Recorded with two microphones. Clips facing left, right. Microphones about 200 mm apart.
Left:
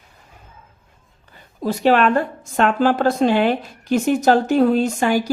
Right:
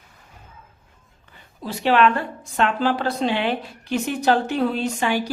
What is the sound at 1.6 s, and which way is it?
A woman's voice, 45° left (ahead or behind).